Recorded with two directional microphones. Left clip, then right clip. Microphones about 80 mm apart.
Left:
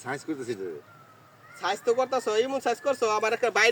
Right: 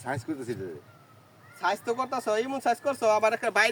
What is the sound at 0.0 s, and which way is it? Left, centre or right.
Speech, right.